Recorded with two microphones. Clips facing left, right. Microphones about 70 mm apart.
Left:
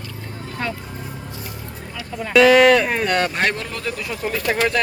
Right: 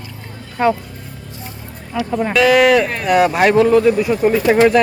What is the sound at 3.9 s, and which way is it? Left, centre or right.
Speech, centre.